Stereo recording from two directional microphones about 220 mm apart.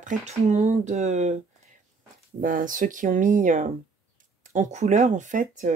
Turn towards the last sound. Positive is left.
turn(degrees=-35)  # may be behind; listen again after turning